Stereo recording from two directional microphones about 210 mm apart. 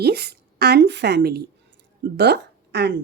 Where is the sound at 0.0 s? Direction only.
50° right (ahead or behind).